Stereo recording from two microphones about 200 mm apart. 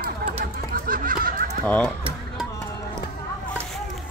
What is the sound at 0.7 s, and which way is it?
Honk, 45° right (ahead or behind).